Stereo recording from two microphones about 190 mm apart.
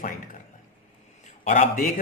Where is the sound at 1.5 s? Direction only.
45° left (ahead or behind).